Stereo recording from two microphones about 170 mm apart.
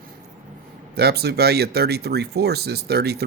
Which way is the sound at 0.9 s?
70° right (ahead or behind).